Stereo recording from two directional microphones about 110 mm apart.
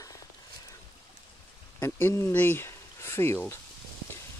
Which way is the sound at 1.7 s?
20° left (ahead or behind).